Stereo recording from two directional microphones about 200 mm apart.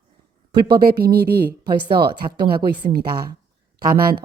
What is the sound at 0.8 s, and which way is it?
Speech, 50° right (ahead or behind).